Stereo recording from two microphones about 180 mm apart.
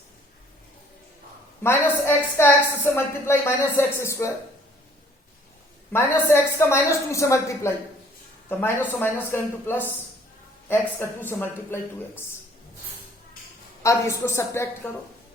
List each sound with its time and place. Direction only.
1.6 s a woman's voice: 15° left (ahead or behind)
5.9 s a woman's voice: 15° left (ahead or behind)
13.8 s a woman's voice: 15° left (ahead or behind)